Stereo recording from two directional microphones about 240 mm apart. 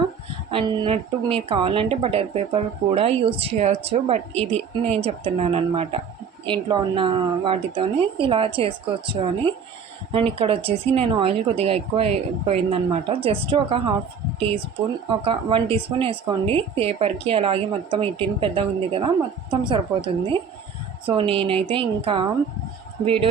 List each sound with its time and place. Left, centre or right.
0.5 s speech: centre